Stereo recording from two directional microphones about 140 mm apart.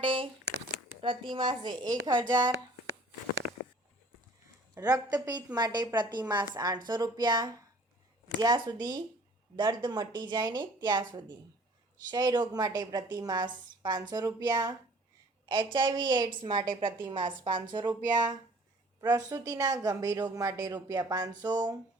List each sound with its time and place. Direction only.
0.0 s a woman's voice: 40° right (ahead or behind)
4.7 s a woman's voice: 25° right (ahead or behind)
18.9 s a woman's voice: 25° right (ahead or behind)